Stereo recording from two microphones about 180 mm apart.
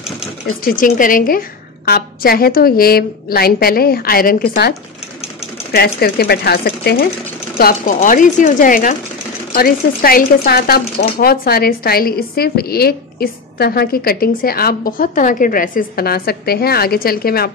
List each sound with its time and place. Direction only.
0.7 s speech: 50° left (ahead or behind)